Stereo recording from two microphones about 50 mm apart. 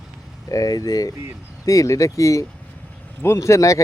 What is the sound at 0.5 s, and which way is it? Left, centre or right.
Speech, left.